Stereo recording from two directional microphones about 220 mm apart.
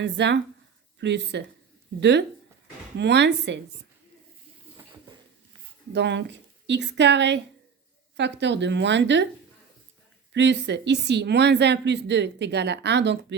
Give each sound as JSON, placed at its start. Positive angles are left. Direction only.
{"t": 0.0, "sound": "a woman's voice", "side_deg": -50}
{"t": 5.9, "sound": "a woman's voice", "side_deg": -50}
{"t": 10.3, "sound": "a woman's voice", "side_deg": -50}